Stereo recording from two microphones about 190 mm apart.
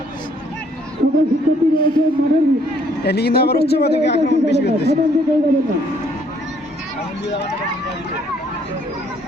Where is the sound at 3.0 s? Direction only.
55° left (ahead or behind).